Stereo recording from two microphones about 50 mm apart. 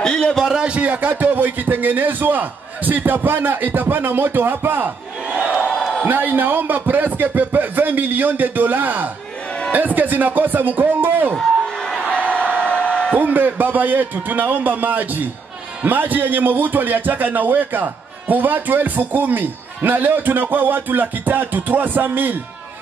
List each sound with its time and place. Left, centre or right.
0.0 s a sound: centre
0.5 s a man's voice: centre; by 5.4 s right
5.4 s crowd: right
6.0 s a man's voice: right
11.3 s music: centre
12.3 s a sound: left
13.1 s a man's voice: right